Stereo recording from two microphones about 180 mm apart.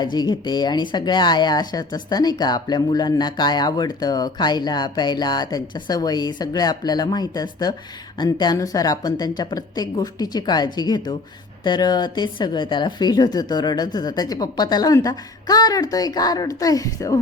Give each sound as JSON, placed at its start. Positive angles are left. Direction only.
{"t": 0.0, "sound": "speech", "side_deg": 20}